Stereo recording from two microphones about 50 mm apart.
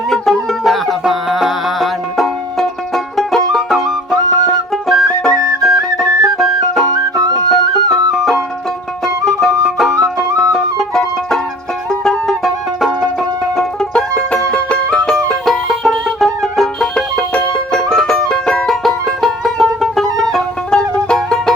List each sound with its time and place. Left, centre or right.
0.1 s music: centre
7.9 s music: centre
13.9 s music: centre
15.1 s music: centre
16.9 s music: centre